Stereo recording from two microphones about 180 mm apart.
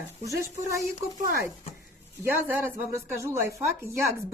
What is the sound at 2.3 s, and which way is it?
A woman's voice, 10° right (ahead or behind).